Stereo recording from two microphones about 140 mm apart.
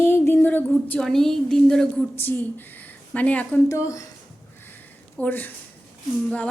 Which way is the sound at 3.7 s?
20° left (ahead or behind).